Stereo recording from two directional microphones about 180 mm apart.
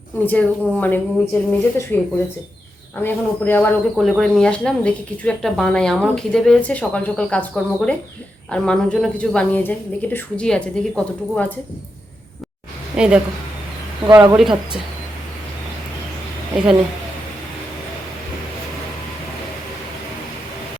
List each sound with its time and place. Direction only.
0.3 s speech: 10° left (ahead or behind)
3.0 s speech: 10° left (ahead or behind)
3.9 s speech: centre (ahead or behind)
13.0 s speech: 5° right (ahead or behind)
14.1 s speech: 15° right (ahead or behind)